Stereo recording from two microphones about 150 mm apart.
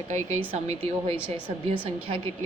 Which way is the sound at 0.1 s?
50° right (ahead or behind).